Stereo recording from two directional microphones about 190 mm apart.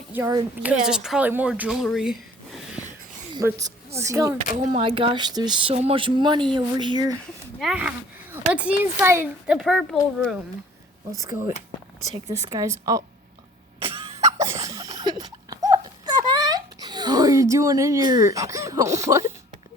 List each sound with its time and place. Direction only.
0.1 s a woman's voice: 15° right (ahead or behind)
0.6 s speech: 5° right (ahead or behind)
3.3 s speech: 20° right (ahead or behind)
4.8 s speech: 30° right (ahead or behind)
7.6 s speech: 5° right (ahead or behind)
11.2 s speech: 15° right (ahead or behind)
12.5 s speech: 20° right (ahead or behind)
13.8 s cough: 30° right (ahead or behind)
14.2 s a sound: 15° right (ahead or behind)